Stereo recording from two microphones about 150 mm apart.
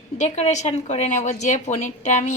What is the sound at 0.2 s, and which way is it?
A woman's voice, 50° left (ahead or behind).